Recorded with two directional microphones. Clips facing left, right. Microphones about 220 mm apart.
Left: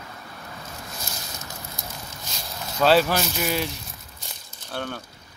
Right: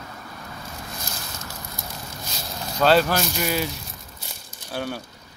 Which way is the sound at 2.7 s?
5° left (ahead or behind).